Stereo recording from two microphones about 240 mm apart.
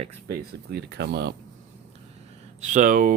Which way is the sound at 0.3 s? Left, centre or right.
Right.